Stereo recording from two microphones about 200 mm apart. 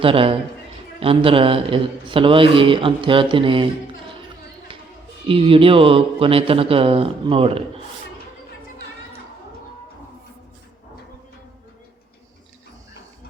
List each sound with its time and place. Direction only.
0.0 s a man's voice: 25° right (ahead or behind)
4.7 s a sound: 25° right (ahead or behind)
5.3 s a man's voice: 25° right (ahead or behind)